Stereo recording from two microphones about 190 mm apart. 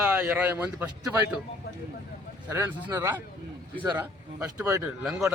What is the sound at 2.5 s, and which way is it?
Speech, 15° right (ahead or behind).